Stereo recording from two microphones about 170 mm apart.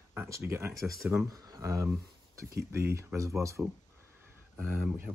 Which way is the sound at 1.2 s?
20° right (ahead or behind).